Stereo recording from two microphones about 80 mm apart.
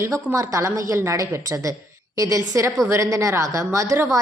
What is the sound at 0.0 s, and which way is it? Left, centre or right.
A woman's voice, right.